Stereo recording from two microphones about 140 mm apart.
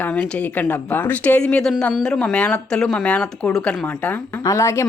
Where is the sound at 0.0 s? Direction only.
10° left (ahead or behind).